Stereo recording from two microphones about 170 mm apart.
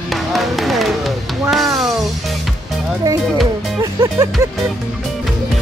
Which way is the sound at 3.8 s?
20° right (ahead or behind).